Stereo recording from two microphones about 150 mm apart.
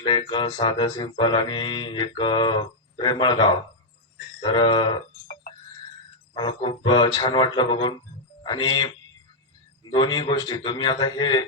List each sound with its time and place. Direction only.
0.0 s mantra: 35° left (ahead or behind)
6.3 s mantra: 30° left (ahead or behind)
8.4 s a man's voice: 30° left (ahead or behind)
9.9 s a man's voice: 30° left (ahead or behind)